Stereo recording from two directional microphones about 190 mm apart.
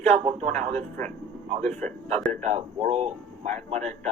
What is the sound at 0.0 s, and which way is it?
Speech, 35° right (ahead or behind).